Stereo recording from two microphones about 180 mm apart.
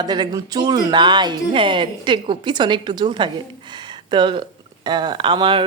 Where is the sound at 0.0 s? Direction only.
25° right (ahead or behind).